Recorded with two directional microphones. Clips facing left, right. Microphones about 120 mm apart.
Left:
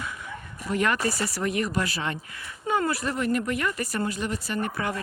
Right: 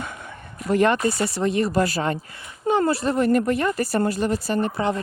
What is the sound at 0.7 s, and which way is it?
Speech, 30° right (ahead or behind).